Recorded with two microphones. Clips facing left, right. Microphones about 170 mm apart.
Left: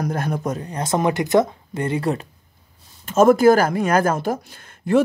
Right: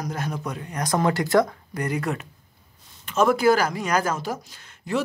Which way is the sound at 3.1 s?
45° left (ahead or behind).